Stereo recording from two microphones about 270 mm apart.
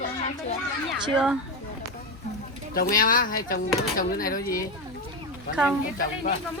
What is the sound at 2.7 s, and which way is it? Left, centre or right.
Speech, left.